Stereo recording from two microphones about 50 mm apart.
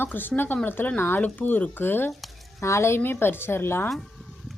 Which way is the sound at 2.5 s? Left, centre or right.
Left.